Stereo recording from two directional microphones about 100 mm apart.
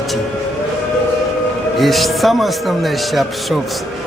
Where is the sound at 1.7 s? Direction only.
Centre (ahead or behind).